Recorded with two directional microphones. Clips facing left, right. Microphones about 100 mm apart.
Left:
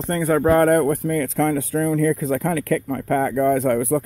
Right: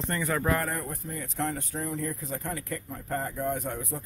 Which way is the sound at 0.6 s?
70° left (ahead or behind).